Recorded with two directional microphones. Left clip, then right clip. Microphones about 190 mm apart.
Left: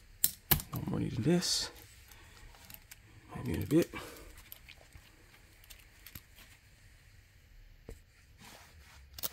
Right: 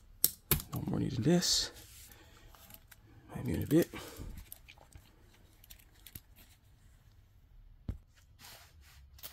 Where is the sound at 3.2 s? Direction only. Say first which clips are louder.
Even; 10° right (ahead or behind).